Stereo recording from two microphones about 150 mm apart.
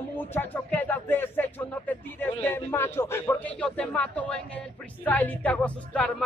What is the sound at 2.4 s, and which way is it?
Speech, 15° left (ahead or behind).